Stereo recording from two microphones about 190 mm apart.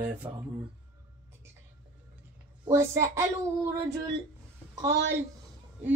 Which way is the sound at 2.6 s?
15° right (ahead or behind).